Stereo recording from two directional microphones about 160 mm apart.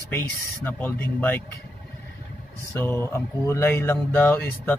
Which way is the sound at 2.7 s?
15° left (ahead or behind).